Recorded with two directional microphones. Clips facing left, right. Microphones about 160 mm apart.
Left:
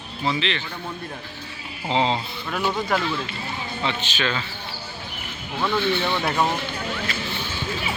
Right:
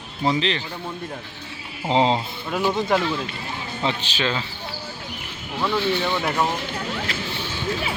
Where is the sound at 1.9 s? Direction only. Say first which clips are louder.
Right 3 dB; 35° right (ahead or behind).